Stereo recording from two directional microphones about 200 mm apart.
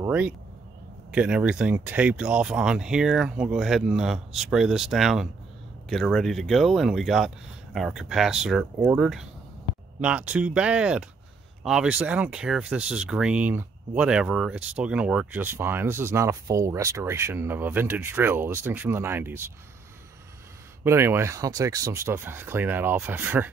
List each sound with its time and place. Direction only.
0.0 s speech: 10° right (ahead or behind)
20.8 s speech: 10° right (ahead or behind)